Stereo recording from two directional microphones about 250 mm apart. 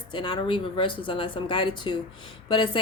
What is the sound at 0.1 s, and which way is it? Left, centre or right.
Speech, centre.